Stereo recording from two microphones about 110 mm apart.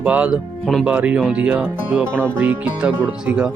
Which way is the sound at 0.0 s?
10° right (ahead or behind).